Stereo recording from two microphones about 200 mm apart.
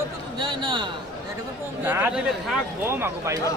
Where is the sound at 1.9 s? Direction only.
10° right (ahead or behind).